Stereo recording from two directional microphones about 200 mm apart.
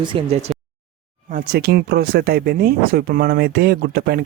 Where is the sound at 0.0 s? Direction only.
25° right (ahead or behind).